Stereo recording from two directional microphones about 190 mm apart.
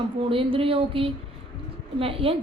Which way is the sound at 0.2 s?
30° right (ahead or behind).